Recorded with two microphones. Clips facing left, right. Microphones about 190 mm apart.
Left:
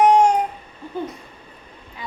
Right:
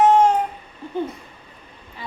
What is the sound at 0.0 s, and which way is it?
Babbling, 15° left (ahead or behind).